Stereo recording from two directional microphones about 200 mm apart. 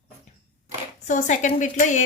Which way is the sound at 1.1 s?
40° left (ahead or behind).